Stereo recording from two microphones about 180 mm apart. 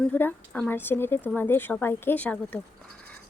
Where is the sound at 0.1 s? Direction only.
10° left (ahead or behind).